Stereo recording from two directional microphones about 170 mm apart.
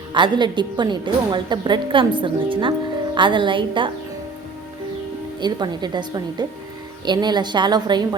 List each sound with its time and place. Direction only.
0.1 s a woman's voice: 25° right (ahead or behind)
5.4 s a woman's voice: 25° right (ahead or behind)